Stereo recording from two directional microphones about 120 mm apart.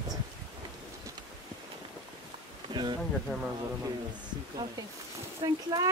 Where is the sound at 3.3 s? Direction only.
Centre (ahead or behind).